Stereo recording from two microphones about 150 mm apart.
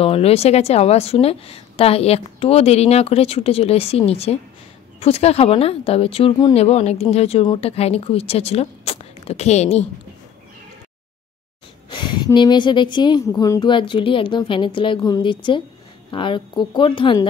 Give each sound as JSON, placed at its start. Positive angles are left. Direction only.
{"t": 0.0, "sound": "a woman's voice", "side_deg": 40}
{"t": 11.9, "sound": "a woman's voice", "side_deg": 30}